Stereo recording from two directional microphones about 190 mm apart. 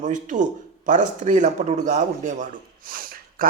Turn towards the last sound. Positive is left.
turn(degrees=-50)  # may be behind; listen again after turning